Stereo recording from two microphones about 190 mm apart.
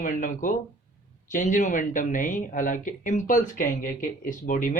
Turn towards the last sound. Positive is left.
turn(degrees=45)  # may be behind; listen again after turning